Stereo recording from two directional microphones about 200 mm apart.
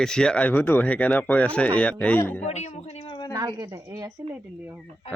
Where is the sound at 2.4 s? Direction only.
35° left (ahead or behind).